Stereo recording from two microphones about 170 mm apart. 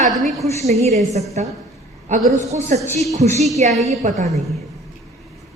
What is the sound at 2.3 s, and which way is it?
A woman's voice, 45° right (ahead or behind).